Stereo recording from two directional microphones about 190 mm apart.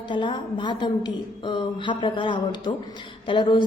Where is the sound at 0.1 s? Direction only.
25° left (ahead or behind).